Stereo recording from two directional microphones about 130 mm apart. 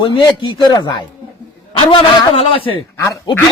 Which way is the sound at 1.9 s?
45° left (ahead or behind).